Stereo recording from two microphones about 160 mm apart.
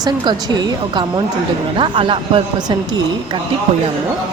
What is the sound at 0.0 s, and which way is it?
A woman's voice, 25° right (ahead or behind).